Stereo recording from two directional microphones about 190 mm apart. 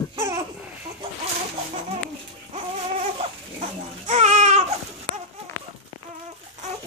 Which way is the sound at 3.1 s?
35° right (ahead or behind).